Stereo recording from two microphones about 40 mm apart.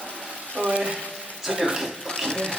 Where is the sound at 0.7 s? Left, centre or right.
Right.